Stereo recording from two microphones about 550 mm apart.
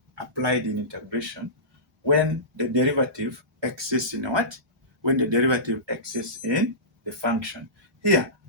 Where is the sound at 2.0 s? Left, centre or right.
Right.